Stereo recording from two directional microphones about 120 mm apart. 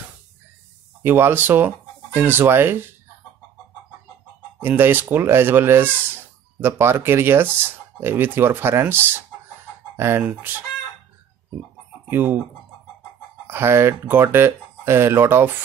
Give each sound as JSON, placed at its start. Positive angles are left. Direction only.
{"t": 1.0, "sound": "speech", "side_deg": -15}
{"t": 4.6, "sound": "speech", "side_deg": -15}
{"t": 12.1, "sound": "speech", "side_deg": -15}
{"t": 13.5, "sound": "speech", "side_deg": -20}